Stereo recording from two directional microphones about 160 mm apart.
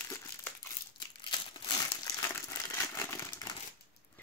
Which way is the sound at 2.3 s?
15° left (ahead or behind).